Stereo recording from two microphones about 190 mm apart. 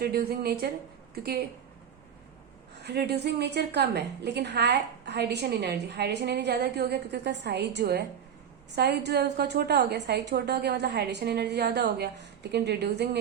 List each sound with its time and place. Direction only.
0.0 s a woman's voice: 55° right (ahead or behind)
2.8 s a woman's voice: 60° right (ahead or behind)